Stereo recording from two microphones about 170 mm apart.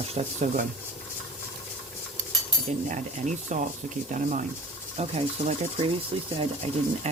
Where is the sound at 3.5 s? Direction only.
45° right (ahead or behind).